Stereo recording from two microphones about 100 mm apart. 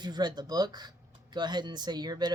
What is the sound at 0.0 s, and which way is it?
Speech, 45° right (ahead or behind).